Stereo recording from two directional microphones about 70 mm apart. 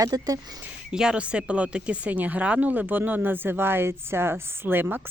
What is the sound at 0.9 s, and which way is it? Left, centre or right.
Speech, centre.